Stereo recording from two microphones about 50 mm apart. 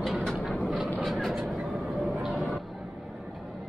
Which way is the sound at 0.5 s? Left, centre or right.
Left.